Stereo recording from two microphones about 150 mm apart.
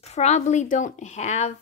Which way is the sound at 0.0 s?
45° left (ahead or behind).